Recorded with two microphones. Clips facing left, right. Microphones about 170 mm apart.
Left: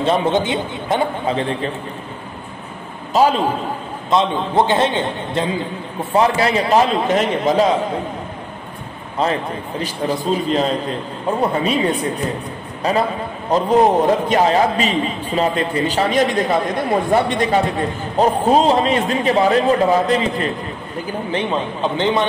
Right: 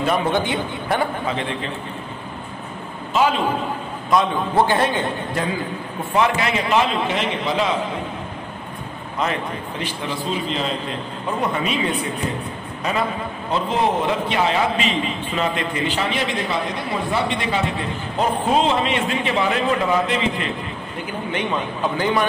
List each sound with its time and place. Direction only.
0.0 s a man's voice: 25° left (ahead or behind)
1.3 s a man's voice: 35° left (ahead or behind)
3.1 s a man's voice: 40° left (ahead or behind)
4.1 s a man's voice: 20° left (ahead or behind)
6.1 s a man's voice: 35° left (ahead or behind)
9.2 s a man's voice: 35° left (ahead or behind)